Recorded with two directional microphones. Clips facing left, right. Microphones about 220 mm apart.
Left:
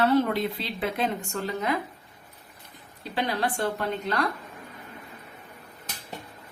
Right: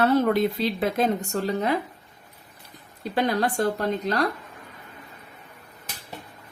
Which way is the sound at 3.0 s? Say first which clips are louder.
Right 4 dB; 45° right (ahead or behind).